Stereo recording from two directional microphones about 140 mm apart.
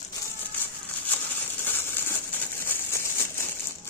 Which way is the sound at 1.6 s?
15° left (ahead or behind).